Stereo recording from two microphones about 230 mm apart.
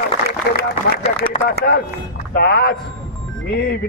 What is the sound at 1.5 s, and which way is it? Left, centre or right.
A man's voice, left.